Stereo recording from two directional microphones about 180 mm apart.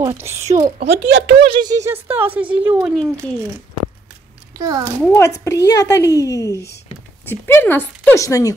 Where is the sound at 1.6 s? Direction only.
20° right (ahead or behind).